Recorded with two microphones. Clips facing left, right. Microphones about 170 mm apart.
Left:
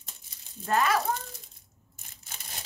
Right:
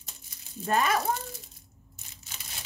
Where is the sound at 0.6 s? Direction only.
15° right (ahead or behind).